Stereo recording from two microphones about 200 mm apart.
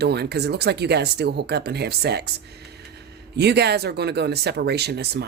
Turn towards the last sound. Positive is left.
turn(degrees=-55)  # may be behind; listen again after turning